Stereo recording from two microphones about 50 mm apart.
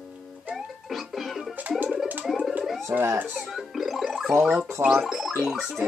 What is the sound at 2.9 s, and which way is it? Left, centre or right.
Speech, right.